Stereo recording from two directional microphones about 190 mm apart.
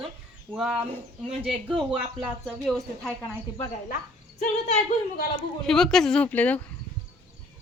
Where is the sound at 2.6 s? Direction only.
Centre (ahead or behind).